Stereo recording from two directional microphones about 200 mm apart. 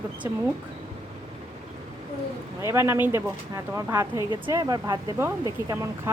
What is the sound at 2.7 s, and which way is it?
Speech, 10° right (ahead or behind).